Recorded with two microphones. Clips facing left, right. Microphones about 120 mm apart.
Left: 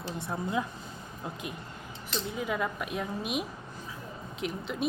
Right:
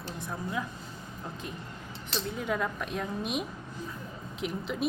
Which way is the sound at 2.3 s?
5° left (ahead or behind).